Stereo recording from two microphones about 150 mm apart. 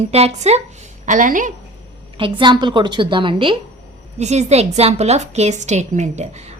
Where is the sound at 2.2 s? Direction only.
30° right (ahead or behind).